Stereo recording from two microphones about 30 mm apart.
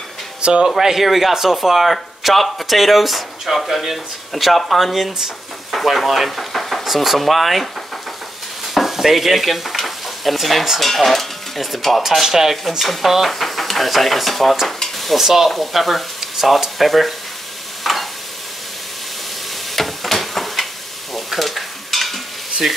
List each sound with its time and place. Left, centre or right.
0.4 s speech: right
0.7 s a man's voice: centre
8.7 s stir: centre
12.0 s a man's voice: centre
12.8 s speech: centre
14.8 s dishes: centre
15.1 s a man's voice: centre
17.9 s stir: centre
19.7 s a sound: centre
21.1 s stir: centre